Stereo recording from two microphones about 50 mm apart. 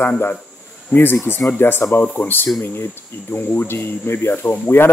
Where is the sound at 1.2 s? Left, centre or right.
Left.